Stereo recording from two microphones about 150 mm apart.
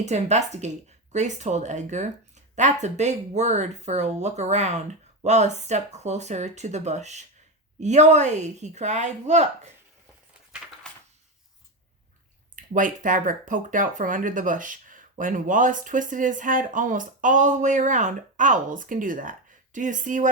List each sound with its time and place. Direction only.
0.0 s speech: 50° right (ahead or behind)
12.5 s speech: 60° right (ahead or behind)